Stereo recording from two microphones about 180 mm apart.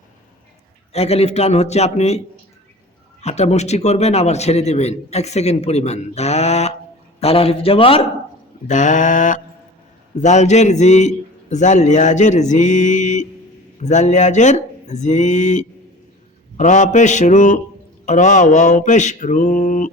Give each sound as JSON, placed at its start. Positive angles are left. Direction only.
{"t": 0.9, "sound": "a man's voice", "side_deg": 35}
{"t": 8.6, "sound": "mantra", "side_deg": 45}
{"t": 10.2, "sound": "a man's voice", "side_deg": 40}
{"t": 16.6, "sound": "mantra", "side_deg": 45}